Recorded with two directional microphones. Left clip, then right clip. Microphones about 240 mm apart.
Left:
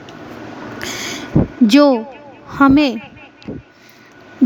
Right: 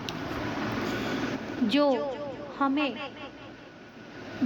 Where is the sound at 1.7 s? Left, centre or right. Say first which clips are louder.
Left 12 dB; left.